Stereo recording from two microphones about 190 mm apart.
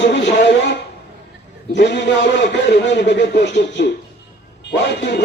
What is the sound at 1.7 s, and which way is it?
A man's voice, 65° left (ahead or behind).